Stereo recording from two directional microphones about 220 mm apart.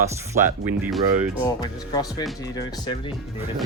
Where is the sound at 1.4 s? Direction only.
20° left (ahead or behind).